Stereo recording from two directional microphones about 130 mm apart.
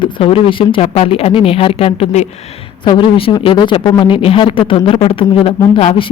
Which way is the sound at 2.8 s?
40° left (ahead or behind).